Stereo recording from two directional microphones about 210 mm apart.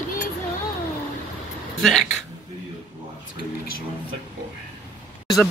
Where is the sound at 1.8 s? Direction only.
Centre (ahead or behind).